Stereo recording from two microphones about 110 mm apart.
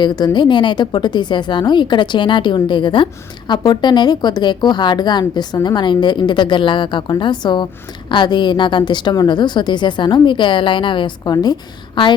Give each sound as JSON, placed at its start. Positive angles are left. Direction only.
{"t": 0.0, "sound": "a woman's voice", "side_deg": 40}
{"t": 11.2, "sound": "a woman's voice", "side_deg": 40}